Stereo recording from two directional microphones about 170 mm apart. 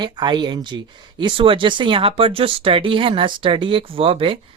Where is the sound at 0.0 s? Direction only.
25° right (ahead or behind).